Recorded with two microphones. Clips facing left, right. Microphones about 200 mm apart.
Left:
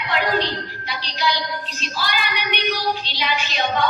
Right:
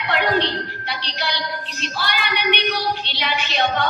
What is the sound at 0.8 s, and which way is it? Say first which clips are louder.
Child singing: left 3 dB; 60° right (ahead or behind).